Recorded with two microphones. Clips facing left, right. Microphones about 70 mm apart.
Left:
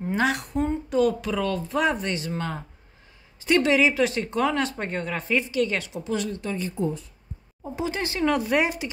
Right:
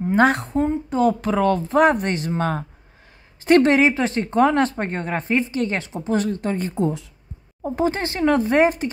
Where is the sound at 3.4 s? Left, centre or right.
Right.